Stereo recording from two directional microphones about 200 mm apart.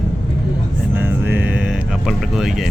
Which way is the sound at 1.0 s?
10° right (ahead or behind).